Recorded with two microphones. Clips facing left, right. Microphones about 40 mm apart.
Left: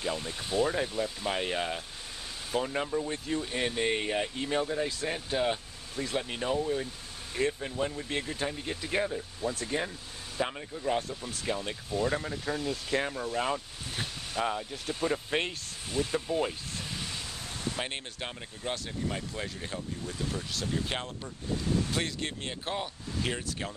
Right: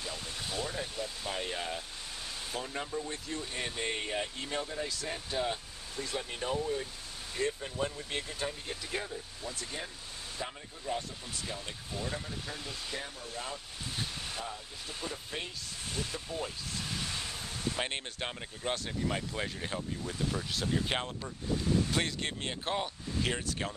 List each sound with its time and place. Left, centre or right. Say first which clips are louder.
0.0 s speech: left 7 dB; left
0.3 s speech: left 9 dB; centre; by 6.4 s left
6.4 s speech: left 3 dB; centre
8.1 s speech: left 4 dB; left
9.6 s speech: left 8 dB; left
10.3 s speech: left 10 dB; left
14.4 s speech: left 9 dB; left
16.1 s speech: left 8 dB; left
17.7 s speech: even; centre